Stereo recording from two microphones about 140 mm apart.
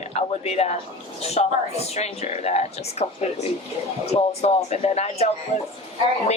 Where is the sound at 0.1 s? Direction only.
50° left (ahead or behind).